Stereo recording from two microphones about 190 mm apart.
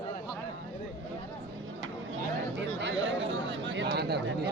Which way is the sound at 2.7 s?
70° right (ahead or behind).